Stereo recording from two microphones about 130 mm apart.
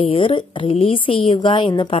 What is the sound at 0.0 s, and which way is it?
A woman's voice, 45° left (ahead or behind).